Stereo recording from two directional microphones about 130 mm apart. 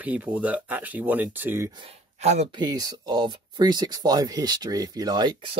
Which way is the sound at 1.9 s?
55° right (ahead or behind).